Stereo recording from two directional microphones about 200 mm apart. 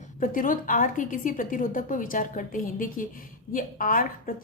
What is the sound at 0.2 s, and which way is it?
A woman's voice, 45° left (ahead or behind).